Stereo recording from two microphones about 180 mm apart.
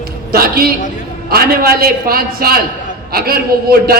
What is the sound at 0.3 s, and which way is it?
A man's voice, 55° right (ahead or behind).